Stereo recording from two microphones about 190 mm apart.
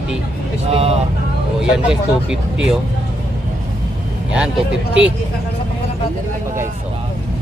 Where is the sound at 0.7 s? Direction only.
30° right (ahead or behind).